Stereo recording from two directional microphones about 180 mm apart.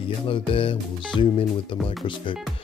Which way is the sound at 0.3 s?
30° left (ahead or behind).